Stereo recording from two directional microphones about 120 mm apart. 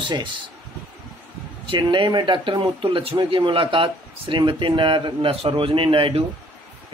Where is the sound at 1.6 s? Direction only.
45° right (ahead or behind).